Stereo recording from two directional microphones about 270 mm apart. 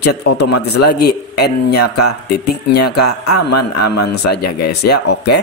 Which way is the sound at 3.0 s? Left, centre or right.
Left.